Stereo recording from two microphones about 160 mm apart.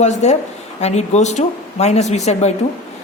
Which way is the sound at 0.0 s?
45° left (ahead or behind).